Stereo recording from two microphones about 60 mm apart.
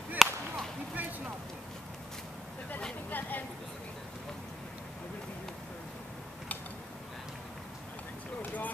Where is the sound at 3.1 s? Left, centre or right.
Left.